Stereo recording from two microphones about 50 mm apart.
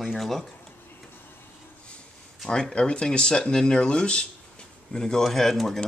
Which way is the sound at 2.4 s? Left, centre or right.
Centre.